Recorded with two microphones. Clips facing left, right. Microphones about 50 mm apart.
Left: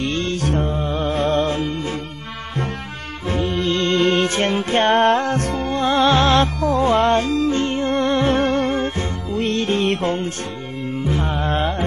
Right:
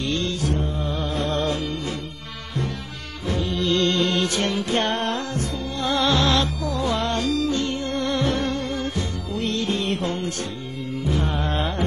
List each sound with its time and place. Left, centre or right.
0.0 s mantra: left
0.4 s music: left
0.7 s music: left
3.3 s music: left
10.0 s music: left